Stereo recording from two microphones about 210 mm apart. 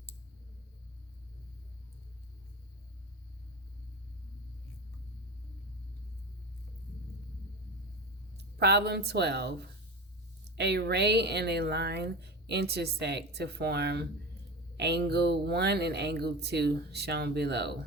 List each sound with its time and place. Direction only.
8.5 s a woman's voice: 50° right (ahead or behind)